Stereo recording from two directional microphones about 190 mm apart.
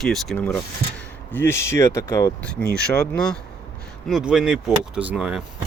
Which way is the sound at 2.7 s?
5° left (ahead or behind).